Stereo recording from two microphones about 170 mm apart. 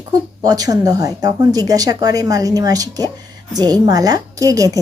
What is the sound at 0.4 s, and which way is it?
A woman's voice, 20° right (ahead or behind).